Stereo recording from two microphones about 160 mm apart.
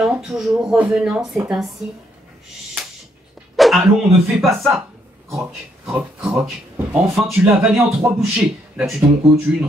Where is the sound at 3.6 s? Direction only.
Centre (ahead or behind).